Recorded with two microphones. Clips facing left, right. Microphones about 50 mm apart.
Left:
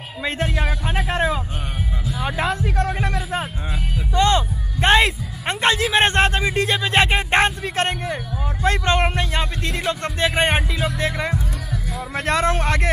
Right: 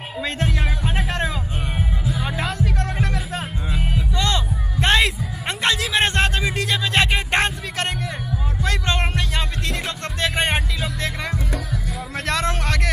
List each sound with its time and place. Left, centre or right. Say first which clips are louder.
0.2 s music: left 2 dB; centre
2.2 s music: left 6 dB; centre
4.1 s a man's voice: left 8 dB; left